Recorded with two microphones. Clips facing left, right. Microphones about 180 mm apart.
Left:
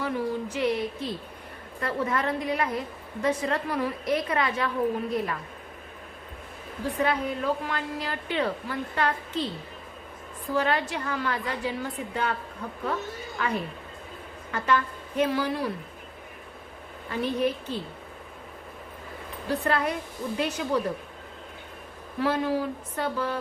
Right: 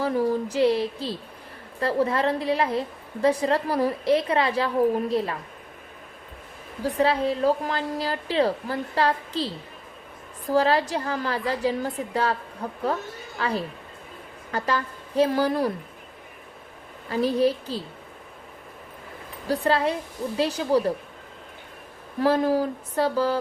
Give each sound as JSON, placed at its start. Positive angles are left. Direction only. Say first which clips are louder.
{"t": 0.0, "sound": "a woman's voice", "louder": "right 5 dB", "side_deg": -40}
{"t": 7.0, "sound": "a woman's voice", "louder": "right 6 dB", "side_deg": -30}
{"t": 10.5, "sound": "a woman's voice", "louder": "right 5 dB", "side_deg": -35}
{"t": 17.1, "sound": "a woman's voice", "louder": "right 5 dB", "side_deg": -35}
{"t": 19.5, "sound": "a woman's voice", "louder": "right 4 dB", "side_deg": -30}
{"t": 22.2, "sound": "a woman's voice", "louder": "right 5 dB", "side_deg": -40}